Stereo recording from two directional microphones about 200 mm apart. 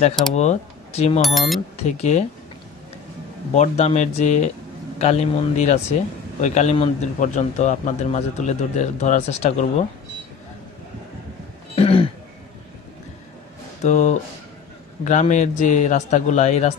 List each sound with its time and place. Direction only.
0.3 s speech: 35° left (ahead or behind)
1.2 s speech: centre (ahead or behind)
1.9 s a man's voice: 35° left (ahead or behind)
3.5 s a man's voice: 35° left (ahead or behind)
11.7 s throat clearing: 30° left (ahead or behind)
13.8 s a man's voice: 35° left (ahead or behind)